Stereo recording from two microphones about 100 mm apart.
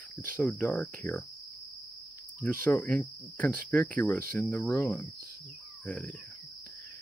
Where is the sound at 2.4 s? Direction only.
25° left (ahead or behind).